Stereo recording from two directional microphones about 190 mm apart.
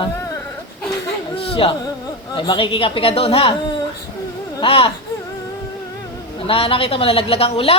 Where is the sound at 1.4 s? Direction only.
30° left (ahead or behind).